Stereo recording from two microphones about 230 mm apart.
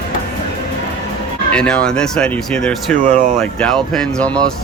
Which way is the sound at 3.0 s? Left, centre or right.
Right.